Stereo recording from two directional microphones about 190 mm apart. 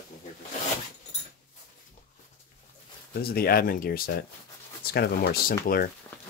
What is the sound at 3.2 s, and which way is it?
Speech, 55° left (ahead or behind).